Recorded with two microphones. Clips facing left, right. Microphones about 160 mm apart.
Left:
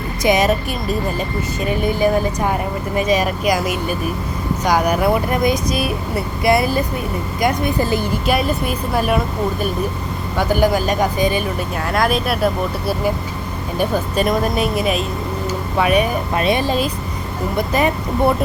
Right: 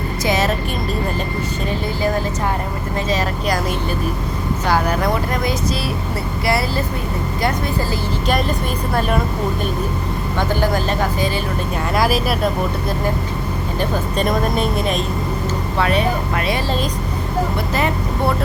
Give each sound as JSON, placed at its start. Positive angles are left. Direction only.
{"t": 0.2, "sound": "speech", "side_deg": 15}
{"t": 8.3, "sound": "speech", "side_deg": 10}
{"t": 10.3, "sound": "speech", "side_deg": 10}
{"t": 11.9, "sound": "speech", "side_deg": -5}
{"t": 13.7, "sound": "speech", "side_deg": 5}